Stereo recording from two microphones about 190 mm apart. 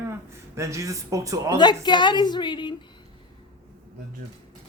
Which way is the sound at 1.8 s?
25° left (ahead or behind).